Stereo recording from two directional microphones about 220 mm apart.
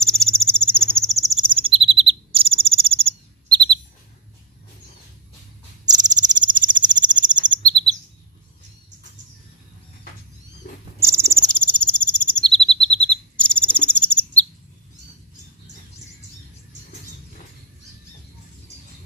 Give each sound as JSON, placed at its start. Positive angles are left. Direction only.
{"t": 0.2, "sound": "cricket", "side_deg": 0}
{"t": 1.5, "sound": "bird vocalization", "side_deg": -25}
{"t": 6.4, "sound": "chirp", "side_deg": -20}
{"t": 11.0, "sound": "owl", "side_deg": -10}
{"t": 11.4, "sound": "bird vocalization", "side_deg": 5}